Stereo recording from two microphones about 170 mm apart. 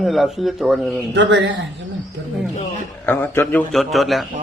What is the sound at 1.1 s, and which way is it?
Speech, 90° right.